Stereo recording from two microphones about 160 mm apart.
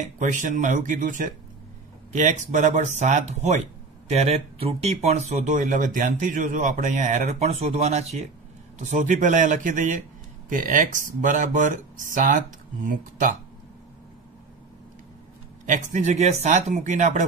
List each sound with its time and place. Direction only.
0.2 s speech: 50° right (ahead or behind)
15.6 s speech: 50° right (ahead or behind)